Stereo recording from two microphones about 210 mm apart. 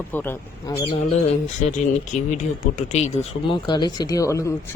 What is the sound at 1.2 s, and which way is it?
Speech, 35° left (ahead or behind).